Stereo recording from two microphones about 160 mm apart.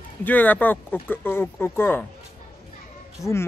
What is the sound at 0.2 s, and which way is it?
Speech, 10° left (ahead or behind).